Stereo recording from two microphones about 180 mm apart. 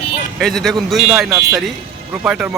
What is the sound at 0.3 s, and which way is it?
Speech, centre (ahead or behind).